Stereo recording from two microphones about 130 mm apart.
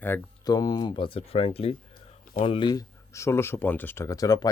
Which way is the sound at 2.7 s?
20° left (ahead or behind).